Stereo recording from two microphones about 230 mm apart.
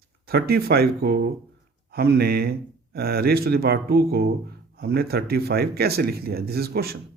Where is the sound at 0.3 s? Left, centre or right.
Right.